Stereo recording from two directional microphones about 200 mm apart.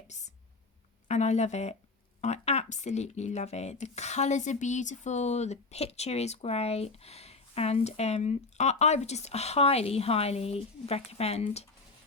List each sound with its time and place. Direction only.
1.0 s speech: 35° left (ahead or behind)